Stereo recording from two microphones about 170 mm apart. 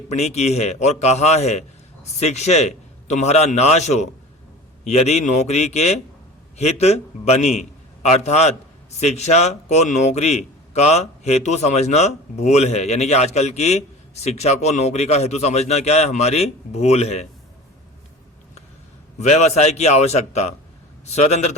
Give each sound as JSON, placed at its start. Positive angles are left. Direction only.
{"t": 0.1, "sound": "speech", "side_deg": 40}
{"t": 19.2, "sound": "speech", "side_deg": 40}